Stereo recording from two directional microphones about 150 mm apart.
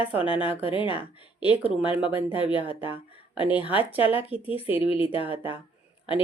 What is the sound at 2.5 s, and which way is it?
Speech, 35° left (ahead or behind).